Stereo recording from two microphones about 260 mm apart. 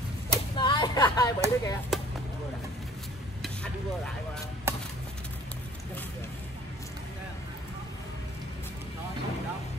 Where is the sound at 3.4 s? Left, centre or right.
Centre.